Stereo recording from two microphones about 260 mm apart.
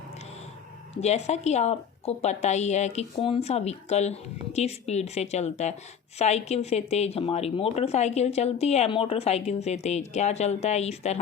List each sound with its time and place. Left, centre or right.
1.0 s a woman's voice: left